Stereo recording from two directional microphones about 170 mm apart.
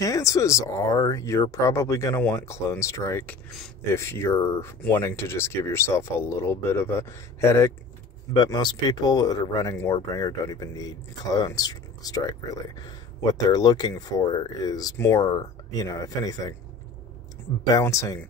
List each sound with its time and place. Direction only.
0.0 s speech: 20° left (ahead or behind)
17.7 s speech: 20° left (ahead or behind)